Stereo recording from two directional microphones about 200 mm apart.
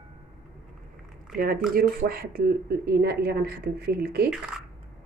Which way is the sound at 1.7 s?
50° right (ahead or behind).